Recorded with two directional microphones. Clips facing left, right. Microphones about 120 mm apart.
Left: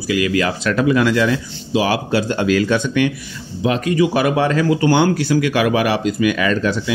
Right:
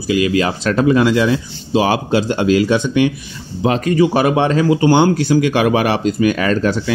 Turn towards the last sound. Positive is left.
turn(degrees=-40)  # may be behind; listen again after turning